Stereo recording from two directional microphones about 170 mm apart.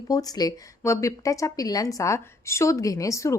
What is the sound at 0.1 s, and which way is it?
Speech, 20° left (ahead or behind).